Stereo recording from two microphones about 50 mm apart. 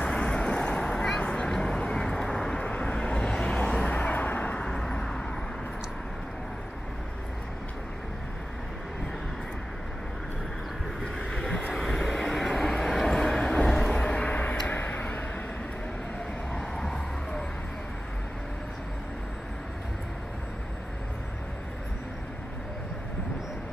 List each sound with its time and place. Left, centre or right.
0.1 s vehicle: left
1.2 s a sound: left
1.5 s vehicle: centre
2.6 s vehicle: left
3.9 s vehicle: left
4.6 s vehicle: centre
11.1 s vehicle: centre
11.8 s vehicle: centre; by 15.2 s left
16.5 s a sound: centre